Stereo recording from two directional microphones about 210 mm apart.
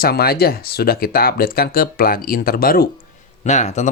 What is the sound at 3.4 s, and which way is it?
Speech, 35° left (ahead or behind).